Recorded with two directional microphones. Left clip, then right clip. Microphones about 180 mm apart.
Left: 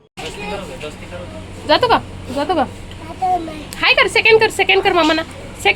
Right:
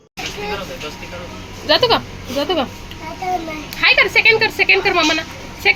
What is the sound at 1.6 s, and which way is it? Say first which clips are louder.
Speech: left 1 dB; centre (ahead or behind).